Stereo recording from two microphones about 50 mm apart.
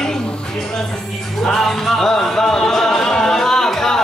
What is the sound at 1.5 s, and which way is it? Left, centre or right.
Music, centre.